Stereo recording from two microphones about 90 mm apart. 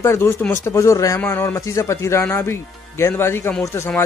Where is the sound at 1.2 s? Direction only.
20° left (ahead or behind).